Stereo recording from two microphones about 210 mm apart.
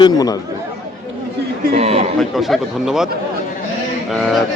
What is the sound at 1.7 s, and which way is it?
Speech, 30° right (ahead or behind).